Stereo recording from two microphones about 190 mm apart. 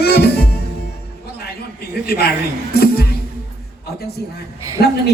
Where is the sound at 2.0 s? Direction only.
55° left (ahead or behind).